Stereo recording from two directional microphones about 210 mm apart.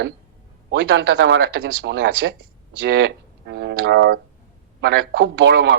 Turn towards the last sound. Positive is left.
turn(degrees=-55)  # may be behind; listen again after turning